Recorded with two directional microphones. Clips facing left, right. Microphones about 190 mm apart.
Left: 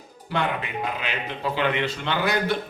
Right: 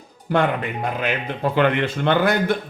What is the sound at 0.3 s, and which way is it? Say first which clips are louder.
A man's voice: right 6 dB; 50° right (ahead or behind).